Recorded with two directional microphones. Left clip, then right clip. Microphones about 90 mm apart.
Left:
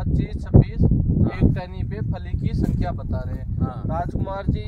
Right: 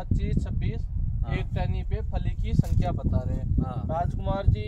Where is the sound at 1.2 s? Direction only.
15° right (ahead or behind).